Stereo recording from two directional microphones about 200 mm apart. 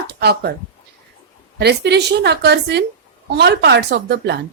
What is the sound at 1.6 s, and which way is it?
A woman's voice, 55° right (ahead or behind).